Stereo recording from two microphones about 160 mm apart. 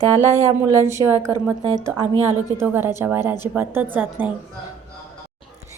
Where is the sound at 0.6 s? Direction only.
15° right (ahead or behind).